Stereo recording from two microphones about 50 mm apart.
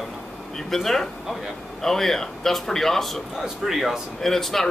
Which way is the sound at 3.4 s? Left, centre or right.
Centre.